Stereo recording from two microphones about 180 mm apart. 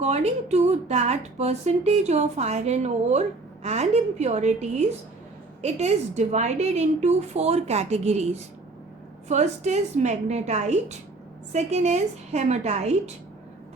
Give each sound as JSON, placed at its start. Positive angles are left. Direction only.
{"t": 0.0, "sound": "a woman's voice", "side_deg": -40}
{"t": 9.3, "sound": "a woman's voice", "side_deg": -40}